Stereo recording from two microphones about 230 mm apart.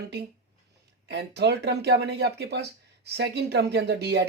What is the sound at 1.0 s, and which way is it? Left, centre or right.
Speech, right.